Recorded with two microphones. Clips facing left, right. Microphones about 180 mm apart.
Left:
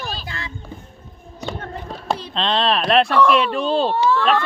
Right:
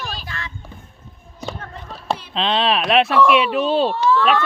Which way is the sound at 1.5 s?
30° left (ahead or behind).